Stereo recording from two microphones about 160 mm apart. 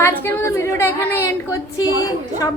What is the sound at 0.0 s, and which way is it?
A woman's voice, 15° left (ahead or behind).